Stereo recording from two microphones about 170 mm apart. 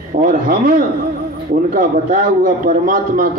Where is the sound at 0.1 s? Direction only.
60° right (ahead or behind).